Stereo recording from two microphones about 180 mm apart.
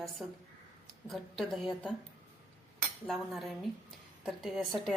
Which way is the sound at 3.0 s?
Centre (ahead or behind).